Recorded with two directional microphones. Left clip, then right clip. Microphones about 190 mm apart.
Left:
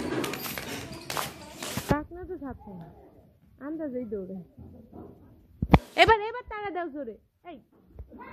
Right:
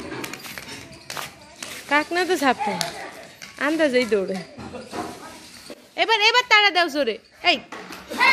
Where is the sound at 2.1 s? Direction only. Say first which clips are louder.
Right 19 dB; 20° right (ahead or behind).